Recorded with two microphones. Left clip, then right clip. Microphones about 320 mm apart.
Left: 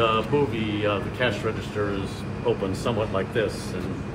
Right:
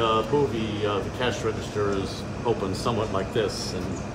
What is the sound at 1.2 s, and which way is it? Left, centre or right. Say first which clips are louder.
Speech: left 3 dB; centre.